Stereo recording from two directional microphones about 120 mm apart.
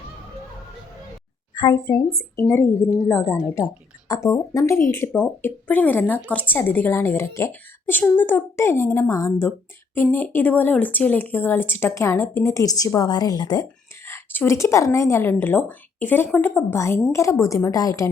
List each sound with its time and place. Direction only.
1.5 s a woman's voice: 35° left (ahead or behind)
4.1 s speech: 25° left (ahead or behind)
14.0 s speech: 20° left (ahead or behind)